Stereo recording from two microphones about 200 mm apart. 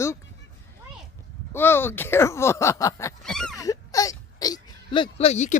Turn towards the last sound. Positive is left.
turn(degrees=35)  # may be behind; listen again after turning